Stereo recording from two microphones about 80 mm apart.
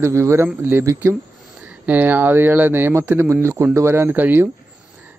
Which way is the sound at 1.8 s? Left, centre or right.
Right.